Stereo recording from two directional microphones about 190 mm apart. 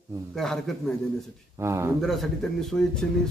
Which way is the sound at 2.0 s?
Centre (ahead or behind).